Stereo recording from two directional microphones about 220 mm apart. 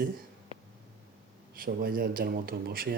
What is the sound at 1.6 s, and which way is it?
Speech, 40° right (ahead or behind).